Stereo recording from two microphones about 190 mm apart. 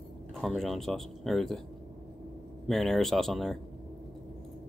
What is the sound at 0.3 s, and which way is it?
Speech, centre (ahead or behind).